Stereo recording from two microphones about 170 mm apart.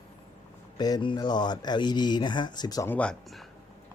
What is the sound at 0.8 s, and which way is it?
Speech, 25° left (ahead or behind).